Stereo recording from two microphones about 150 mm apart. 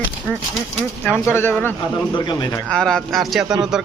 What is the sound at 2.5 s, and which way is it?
Speech, 5° left (ahead or behind).